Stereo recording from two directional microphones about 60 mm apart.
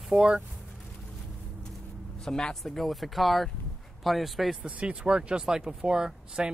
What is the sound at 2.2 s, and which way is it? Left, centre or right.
Speech, centre.